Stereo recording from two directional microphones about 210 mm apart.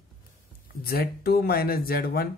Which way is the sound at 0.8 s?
45° left (ahead or behind).